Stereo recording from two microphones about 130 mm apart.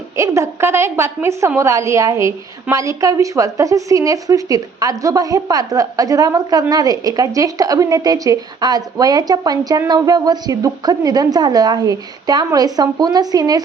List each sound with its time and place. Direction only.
0.2 s a woman's voice: 25° right (ahead or behind)